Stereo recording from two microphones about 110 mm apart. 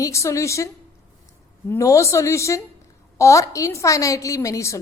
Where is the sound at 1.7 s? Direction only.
30° left (ahead or behind).